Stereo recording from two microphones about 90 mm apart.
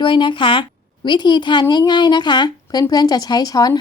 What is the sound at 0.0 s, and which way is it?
Speech, 65° left (ahead or behind).